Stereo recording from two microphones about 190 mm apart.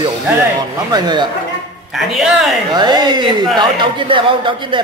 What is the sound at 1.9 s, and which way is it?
Speech, centre (ahead or behind).